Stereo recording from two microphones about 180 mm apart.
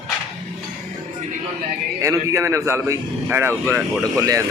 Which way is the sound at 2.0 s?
15° right (ahead or behind).